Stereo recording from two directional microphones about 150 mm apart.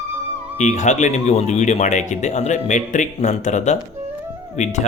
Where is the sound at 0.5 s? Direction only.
50° left (ahead or behind).